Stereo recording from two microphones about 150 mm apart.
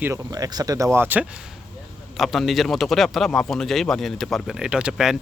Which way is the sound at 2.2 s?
Centre (ahead or behind).